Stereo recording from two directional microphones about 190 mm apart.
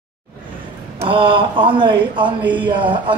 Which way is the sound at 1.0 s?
25° right (ahead or behind).